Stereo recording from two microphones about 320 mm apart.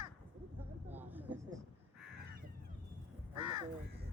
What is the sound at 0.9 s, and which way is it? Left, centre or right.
Vehicle, centre.